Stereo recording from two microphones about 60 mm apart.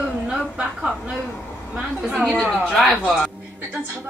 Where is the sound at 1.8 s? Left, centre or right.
Centre.